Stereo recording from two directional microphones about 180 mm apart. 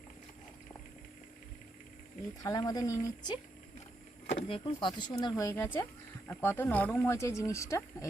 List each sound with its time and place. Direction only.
2.4 s speech: 20° left (ahead or behind)
4.4 s speech: 30° left (ahead or behind)